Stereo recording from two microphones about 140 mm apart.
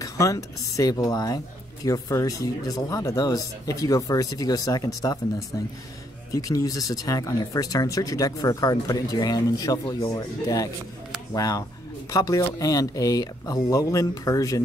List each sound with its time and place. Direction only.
0.0 s speech: 25° left (ahead or behind)
6.3 s speech: 25° left (ahead or behind)